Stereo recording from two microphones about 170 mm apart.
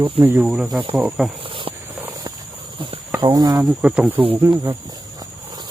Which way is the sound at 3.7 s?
5° right (ahead or behind).